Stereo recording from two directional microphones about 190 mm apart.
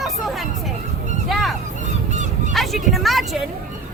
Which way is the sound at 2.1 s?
40° right (ahead or behind).